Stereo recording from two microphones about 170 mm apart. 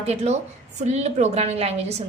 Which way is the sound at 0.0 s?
40° right (ahead or behind).